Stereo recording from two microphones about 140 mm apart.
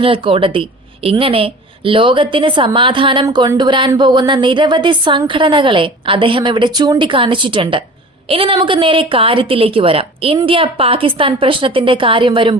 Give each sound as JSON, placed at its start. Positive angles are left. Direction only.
{"t": 0.0, "sound": "speech", "side_deg": -40}
{"t": 3.2, "sound": "speech", "side_deg": -25}